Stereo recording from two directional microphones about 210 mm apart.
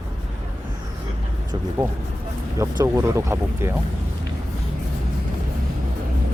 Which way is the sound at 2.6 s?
15° right (ahead or behind).